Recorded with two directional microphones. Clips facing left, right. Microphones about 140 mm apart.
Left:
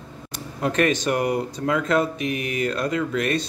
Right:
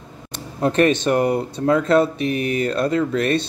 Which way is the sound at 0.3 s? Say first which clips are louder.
Right 4 dB; 30° right (ahead or behind).